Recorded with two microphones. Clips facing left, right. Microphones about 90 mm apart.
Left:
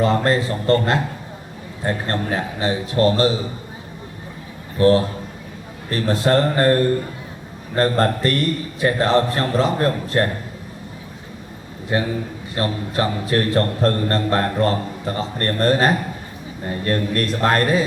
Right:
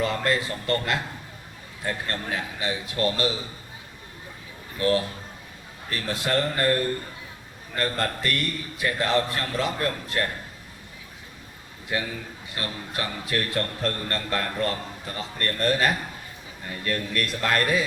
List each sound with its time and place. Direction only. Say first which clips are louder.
0.0 s a man's voice: left 7 dB; 35° left (ahead or behind)
4.8 s a man's voice: left 9 dB; 35° left (ahead or behind)
7.8 s a man's voice: left 9 dB; 35° left (ahead or behind)
11.9 s a man's voice: left 8 dB; 35° left (ahead or behind)